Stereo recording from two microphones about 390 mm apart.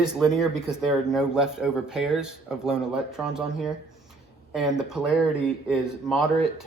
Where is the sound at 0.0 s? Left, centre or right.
Centre.